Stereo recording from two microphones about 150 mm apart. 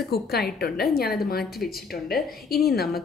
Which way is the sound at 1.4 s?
Centre (ahead or behind).